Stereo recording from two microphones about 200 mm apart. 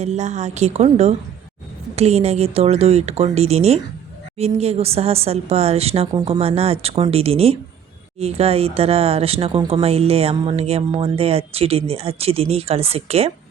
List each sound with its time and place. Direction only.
0.0 s speech: 35° right (ahead or behind)